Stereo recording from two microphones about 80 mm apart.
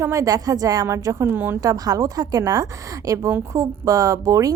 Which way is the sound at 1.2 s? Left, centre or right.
Right.